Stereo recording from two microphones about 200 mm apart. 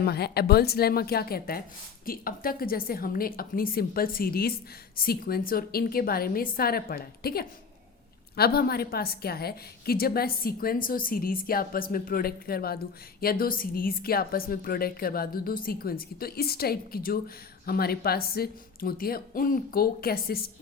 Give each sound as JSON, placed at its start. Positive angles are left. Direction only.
{"t": 0.0, "sound": "a woman's voice", "side_deg": 50}